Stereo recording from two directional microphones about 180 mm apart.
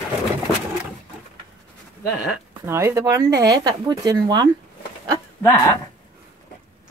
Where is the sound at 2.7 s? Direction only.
15° right (ahead or behind).